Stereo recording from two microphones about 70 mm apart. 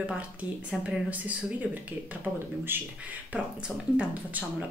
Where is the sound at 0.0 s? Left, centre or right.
Centre.